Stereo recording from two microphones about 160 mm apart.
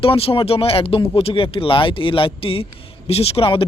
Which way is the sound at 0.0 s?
35° left (ahead or behind).